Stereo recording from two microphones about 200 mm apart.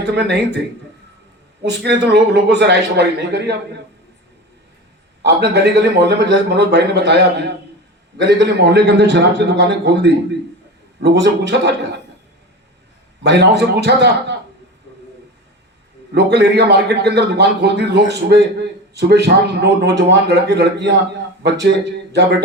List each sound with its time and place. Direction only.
0.0 s a man's voice: 60° right (ahead or behind)
1.8 s a man's voice: 55° right (ahead or behind)
5.2 s a man's voice: 55° right (ahead or behind)
13.2 s a man's voice: 55° right (ahead or behind)
16.1 s a man's voice: 55° right (ahead or behind)